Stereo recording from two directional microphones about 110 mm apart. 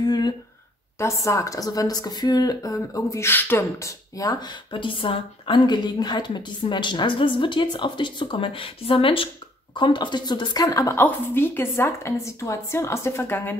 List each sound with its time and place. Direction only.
0.0 s a sound: 40° left (ahead or behind)
0.9 s speech: 25° left (ahead or behind)
4.7 s a woman's voice: 55° left (ahead or behind); by 11.0 s 30° left (ahead or behind)
11.0 s a woman's voice: 20° left (ahead or behind)